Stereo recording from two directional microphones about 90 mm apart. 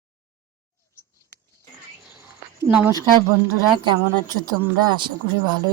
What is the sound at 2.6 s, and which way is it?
Speech, 15° right (ahead or behind).